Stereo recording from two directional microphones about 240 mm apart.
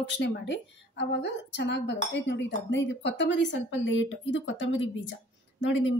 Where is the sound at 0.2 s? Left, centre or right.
Left.